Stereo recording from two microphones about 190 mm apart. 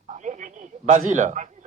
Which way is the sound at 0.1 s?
40° right (ahead or behind).